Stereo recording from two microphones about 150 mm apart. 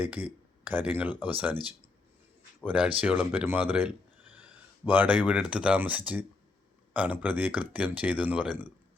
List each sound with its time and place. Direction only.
0.0 s speech: 10° right (ahead or behind)
2.6 s speech: 10° right (ahead or behind)